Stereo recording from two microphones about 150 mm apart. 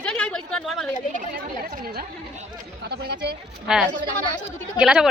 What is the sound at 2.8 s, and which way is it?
Speech, 90° right.